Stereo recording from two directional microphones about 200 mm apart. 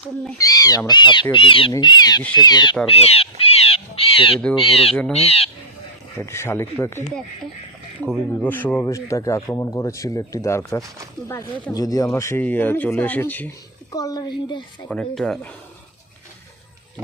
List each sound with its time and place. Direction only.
0.3 s speech: 15° left (ahead or behind)
6.1 s speech: 15° left (ahead or behind)
8.0 s speech: 5° left (ahead or behind); by 14.6 s 20° left (ahead or behind)
14.8 s speech: 5° left (ahead or behind)